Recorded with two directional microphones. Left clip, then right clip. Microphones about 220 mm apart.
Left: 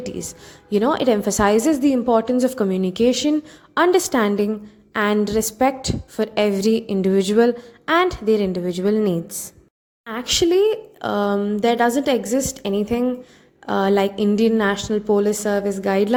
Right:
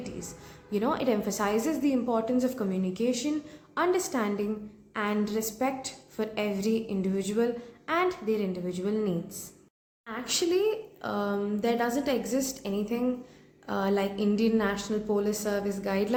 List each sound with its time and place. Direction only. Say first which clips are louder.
0.0 s a woman's voice: left 10 dB; 35° left (ahead or behind)